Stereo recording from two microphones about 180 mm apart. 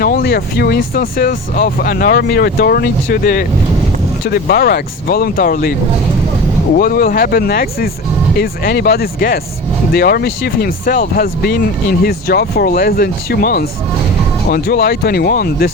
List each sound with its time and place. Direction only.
0.0 s speech: 55° left (ahead or behind)
6.7 s speech: 55° left (ahead or behind)